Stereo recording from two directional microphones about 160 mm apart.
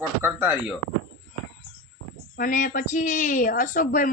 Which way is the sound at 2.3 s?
60° left (ahead or behind).